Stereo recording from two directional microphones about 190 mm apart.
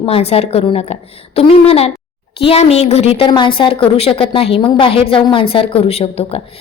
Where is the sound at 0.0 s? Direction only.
30° left (ahead or behind).